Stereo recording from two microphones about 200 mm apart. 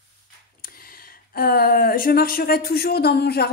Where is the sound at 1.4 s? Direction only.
50° left (ahead or behind).